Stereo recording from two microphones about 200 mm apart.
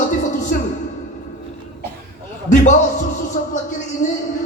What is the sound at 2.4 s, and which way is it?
Speech, 40° left (ahead or behind).